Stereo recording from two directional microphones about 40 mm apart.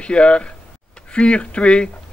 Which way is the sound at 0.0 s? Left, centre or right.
Left.